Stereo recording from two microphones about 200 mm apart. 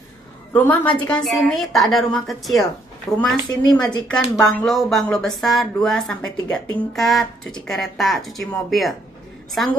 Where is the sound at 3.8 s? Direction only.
5° left (ahead or behind).